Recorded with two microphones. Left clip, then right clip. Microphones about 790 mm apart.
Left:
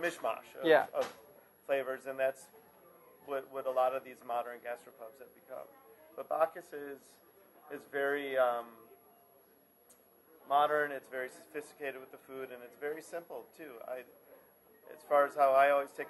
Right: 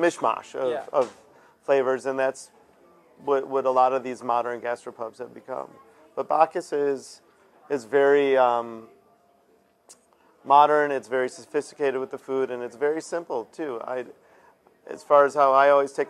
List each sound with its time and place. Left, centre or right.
0.0 s speech: right
1.7 s a man's voice: right
10.5 s a man's voice: right